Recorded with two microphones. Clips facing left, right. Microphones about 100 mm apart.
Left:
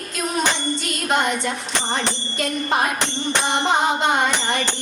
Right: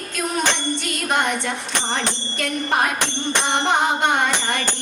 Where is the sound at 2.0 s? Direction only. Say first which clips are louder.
Left 1 dB; 20° left (ahead or behind).